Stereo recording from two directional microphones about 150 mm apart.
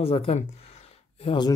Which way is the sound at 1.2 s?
30° left (ahead or behind).